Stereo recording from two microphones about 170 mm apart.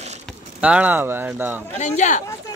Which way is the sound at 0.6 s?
10° right (ahead or behind).